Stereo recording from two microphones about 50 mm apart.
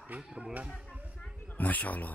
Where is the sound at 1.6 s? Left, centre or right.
Left.